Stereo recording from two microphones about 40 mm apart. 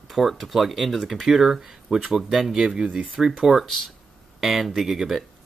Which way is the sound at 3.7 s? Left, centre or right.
Centre.